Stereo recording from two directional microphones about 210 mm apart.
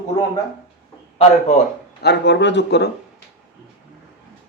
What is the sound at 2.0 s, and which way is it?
Speech, 55° left (ahead or behind).